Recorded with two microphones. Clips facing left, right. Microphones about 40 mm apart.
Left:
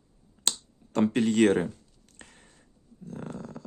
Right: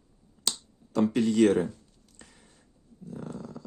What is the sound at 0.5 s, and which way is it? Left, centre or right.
Finger snapping, left.